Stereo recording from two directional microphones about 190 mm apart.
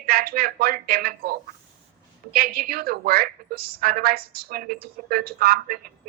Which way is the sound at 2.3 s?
50° right (ahead or behind).